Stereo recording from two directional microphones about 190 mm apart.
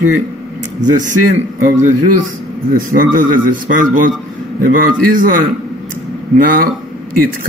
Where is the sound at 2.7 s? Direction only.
50° right (ahead or behind).